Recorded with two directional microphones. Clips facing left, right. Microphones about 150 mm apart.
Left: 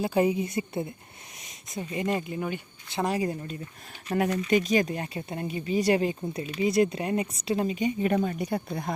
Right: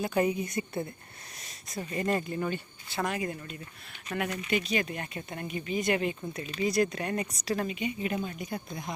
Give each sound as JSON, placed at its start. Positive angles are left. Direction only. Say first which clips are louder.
{"t": 0.0, "sound": "speech", "louder": "left 3 dB", "side_deg": 30}
{"t": 3.0, "sound": "speech", "louder": "left 4 dB", "side_deg": 30}
{"t": 7.8, "sound": "speech", "louder": "left 6 dB", "side_deg": 40}
{"t": 8.1, "sound": "speech", "louder": "left 7 dB", "side_deg": 70}